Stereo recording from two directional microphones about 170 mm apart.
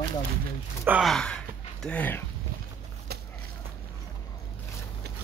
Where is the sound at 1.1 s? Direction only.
5° left (ahead or behind).